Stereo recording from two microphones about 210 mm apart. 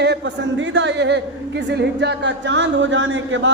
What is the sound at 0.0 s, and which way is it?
A man's voice, 55° right (ahead or behind).